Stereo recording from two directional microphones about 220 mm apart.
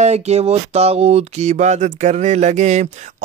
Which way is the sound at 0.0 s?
30° right (ahead or behind).